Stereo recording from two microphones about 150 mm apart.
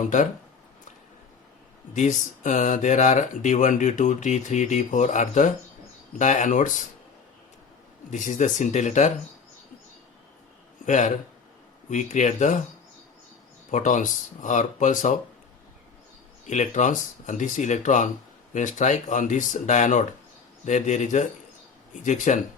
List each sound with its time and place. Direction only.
1.9 s speech: 55° left (ahead or behind)
8.1 s speech: 55° left (ahead or behind)
10.8 s speech: 55° left (ahead or behind)
13.7 s speech: 55° left (ahead or behind)
16.5 s speech: 55° left (ahead or behind)